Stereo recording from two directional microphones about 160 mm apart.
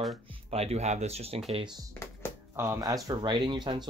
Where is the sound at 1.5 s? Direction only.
30° right (ahead or behind).